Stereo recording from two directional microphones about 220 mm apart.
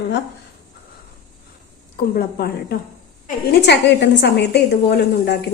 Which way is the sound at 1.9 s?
45° left (ahead or behind).